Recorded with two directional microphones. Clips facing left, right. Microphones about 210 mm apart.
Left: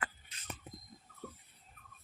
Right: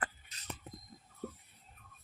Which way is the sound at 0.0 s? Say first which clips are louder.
Right 2 dB; 40° right (ahead or behind).